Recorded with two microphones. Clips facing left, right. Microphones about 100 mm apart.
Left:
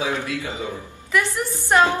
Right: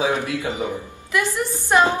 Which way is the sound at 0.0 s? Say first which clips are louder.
Right 3 dB; 25° right (ahead or behind).